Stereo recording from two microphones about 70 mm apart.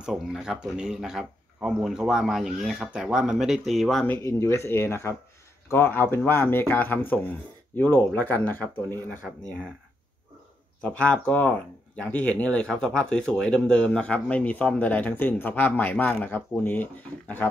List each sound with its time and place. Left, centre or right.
0.0 s speech: centre
4.2 s speech: left
10.8 s speech: centre